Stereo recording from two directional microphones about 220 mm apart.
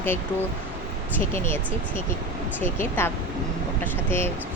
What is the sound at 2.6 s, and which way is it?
Speech, 10° left (ahead or behind).